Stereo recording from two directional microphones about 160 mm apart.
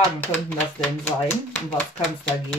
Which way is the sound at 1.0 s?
15° left (ahead or behind).